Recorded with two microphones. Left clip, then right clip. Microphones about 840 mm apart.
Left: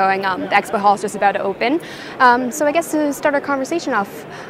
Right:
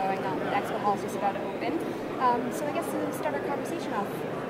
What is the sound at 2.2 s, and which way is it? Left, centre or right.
Speech, left.